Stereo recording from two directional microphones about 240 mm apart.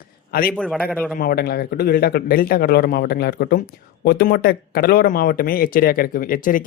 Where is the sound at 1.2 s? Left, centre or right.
Left.